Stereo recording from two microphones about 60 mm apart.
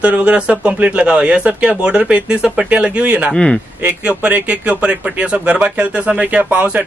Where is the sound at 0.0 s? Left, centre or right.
Centre.